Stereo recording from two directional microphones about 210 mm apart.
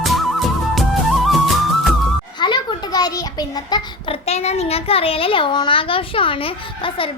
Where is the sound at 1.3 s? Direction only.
Centre (ahead or behind).